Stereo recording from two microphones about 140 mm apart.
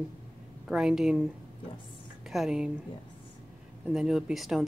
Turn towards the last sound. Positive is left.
turn(degrees=0)  # may be behind; listen again after turning